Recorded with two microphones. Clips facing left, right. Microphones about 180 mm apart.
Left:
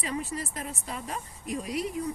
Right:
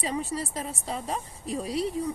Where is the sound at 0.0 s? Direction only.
30° right (ahead or behind).